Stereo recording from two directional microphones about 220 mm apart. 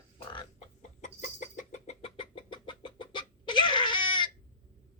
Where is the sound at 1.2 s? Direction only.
35° left (ahead or behind).